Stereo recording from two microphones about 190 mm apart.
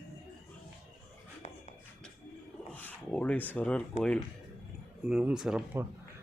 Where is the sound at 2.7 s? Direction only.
10° left (ahead or behind).